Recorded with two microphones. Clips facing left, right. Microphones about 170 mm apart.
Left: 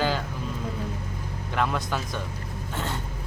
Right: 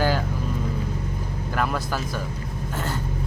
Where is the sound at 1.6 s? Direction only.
5° right (ahead or behind).